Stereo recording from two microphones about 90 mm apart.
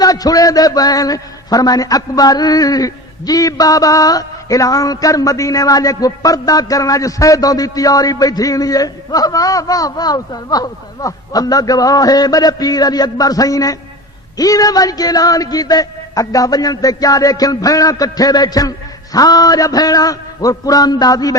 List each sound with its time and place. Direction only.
0.0 s a man's voice: 45° left (ahead or behind)